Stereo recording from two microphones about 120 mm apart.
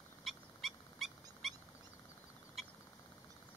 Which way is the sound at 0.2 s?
Centre (ahead or behind).